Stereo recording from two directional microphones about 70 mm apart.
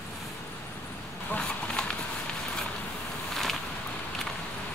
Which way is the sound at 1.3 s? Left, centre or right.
Centre.